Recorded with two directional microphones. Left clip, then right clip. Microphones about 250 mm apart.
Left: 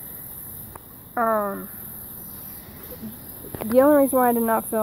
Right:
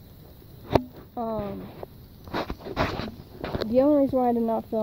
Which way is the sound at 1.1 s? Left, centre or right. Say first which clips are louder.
Left 9 dB; left.